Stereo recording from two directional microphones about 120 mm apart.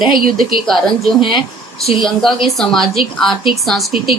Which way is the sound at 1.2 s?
40° left (ahead or behind).